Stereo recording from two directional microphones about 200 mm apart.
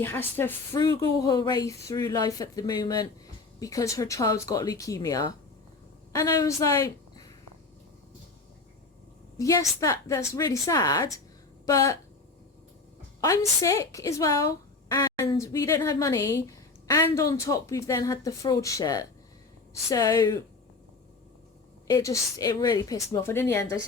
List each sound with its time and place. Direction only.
0.0 s a woman's voice: 10° left (ahead or behind)
9.4 s a woman's voice: 15° left (ahead or behind)
13.6 s a woman's voice: 15° left (ahead or behind)
21.8 s a woman's voice: 15° left (ahead or behind)